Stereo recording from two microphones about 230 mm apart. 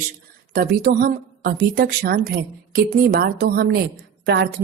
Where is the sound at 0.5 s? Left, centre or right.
Right.